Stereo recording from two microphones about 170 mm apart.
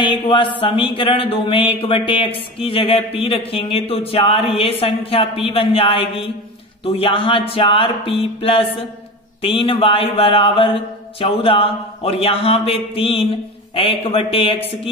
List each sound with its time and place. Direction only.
0.0 s speech: 30° left (ahead or behind)